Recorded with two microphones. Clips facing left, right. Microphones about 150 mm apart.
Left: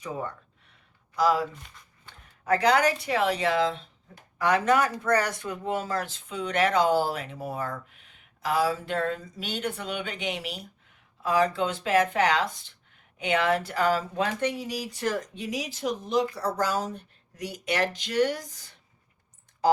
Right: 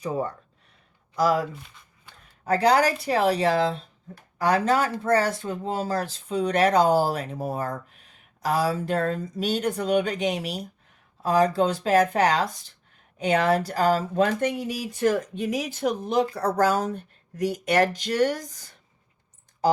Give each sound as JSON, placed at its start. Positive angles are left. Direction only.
{"t": 0.0, "sound": "speech", "side_deg": -35}
{"t": 2.4, "sound": "speech", "side_deg": -35}